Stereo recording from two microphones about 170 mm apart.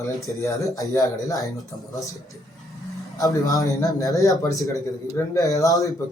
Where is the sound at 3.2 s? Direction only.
20° left (ahead or behind).